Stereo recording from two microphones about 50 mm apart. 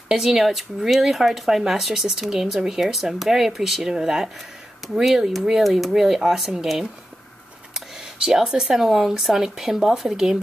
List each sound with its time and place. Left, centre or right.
0.1 s speech: centre